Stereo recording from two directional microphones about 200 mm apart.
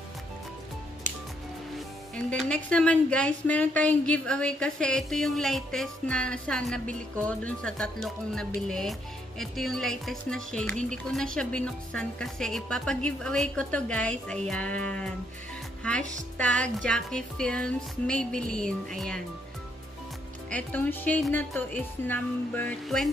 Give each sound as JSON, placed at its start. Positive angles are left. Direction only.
{"t": 2.1, "sound": "a woman's voice", "side_deg": 5}
{"t": 16.0, "sound": "speech", "side_deg": -40}
{"t": 16.3, "sound": "a woman's voice", "side_deg": 5}
{"t": 20.4, "sound": "speech", "side_deg": 5}